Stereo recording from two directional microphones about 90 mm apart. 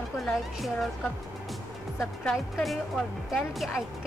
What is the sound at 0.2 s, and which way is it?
Speech, centre (ahead or behind).